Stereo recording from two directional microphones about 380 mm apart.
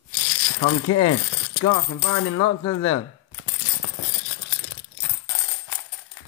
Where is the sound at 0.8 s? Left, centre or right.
Left.